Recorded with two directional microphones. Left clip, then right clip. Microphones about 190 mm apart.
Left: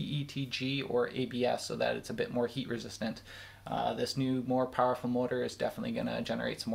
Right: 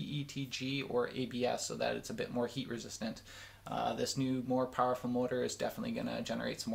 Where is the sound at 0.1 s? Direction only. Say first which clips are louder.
Left 3 dB; 20° left (ahead or behind).